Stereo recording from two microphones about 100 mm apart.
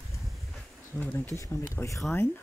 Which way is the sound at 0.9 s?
15° left (ahead or behind).